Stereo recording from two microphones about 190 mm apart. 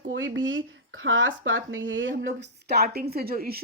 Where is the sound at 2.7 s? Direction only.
55° right (ahead or behind).